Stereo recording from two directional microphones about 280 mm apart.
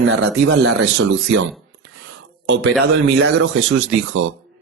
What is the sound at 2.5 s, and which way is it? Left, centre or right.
A man's voice, right.